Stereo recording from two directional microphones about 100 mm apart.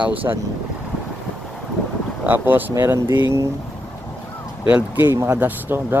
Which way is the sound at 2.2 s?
20° right (ahead or behind).